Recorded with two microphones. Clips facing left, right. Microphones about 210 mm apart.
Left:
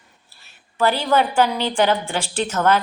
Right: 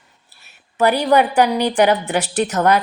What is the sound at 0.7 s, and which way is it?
Speech, 20° right (ahead or behind).